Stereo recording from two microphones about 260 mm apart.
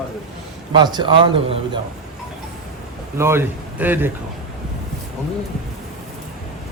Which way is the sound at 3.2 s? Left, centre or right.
Centre.